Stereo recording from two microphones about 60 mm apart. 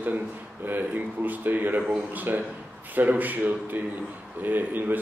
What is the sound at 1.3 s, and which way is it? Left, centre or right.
A man's voice, right.